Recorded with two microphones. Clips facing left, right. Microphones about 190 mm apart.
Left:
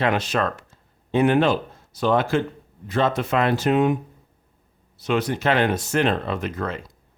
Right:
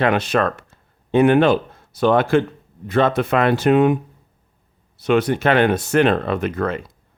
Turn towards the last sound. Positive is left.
turn(degrees=-60)  # may be behind; listen again after turning